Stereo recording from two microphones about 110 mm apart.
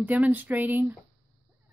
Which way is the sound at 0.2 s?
15° right (ahead or behind).